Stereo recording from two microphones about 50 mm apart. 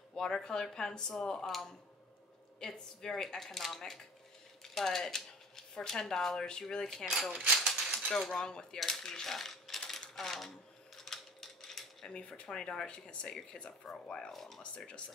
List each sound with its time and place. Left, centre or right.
0.1 s speech: centre
7.5 s mechanisms: centre
8.2 s speech: centre
11.0 s typewriter: centre
12.1 s speech: left
14.3 s speech: centre